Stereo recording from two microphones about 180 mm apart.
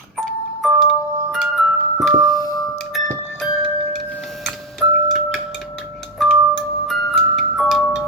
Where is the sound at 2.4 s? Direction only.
20° left (ahead or behind).